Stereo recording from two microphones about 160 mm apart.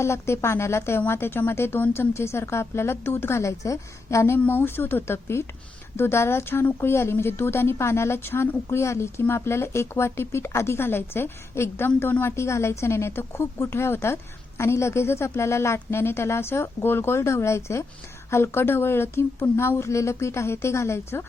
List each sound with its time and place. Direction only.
0.0 s a woman's voice: 15° left (ahead or behind)